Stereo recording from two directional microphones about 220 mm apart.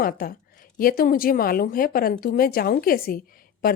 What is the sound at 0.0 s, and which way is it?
A woman's voice, 40° left (ahead or behind).